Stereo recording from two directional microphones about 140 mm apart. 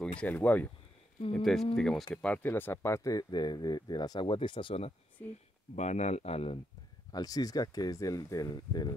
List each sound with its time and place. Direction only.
0.2 s speech: 10° left (ahead or behind); by 4.9 s 40° left (ahead or behind)
5.2 s speech: 15° left (ahead or behind)
5.8 s speech: 55° left (ahead or behind)
7.1 s speech: 25° left (ahead or behind)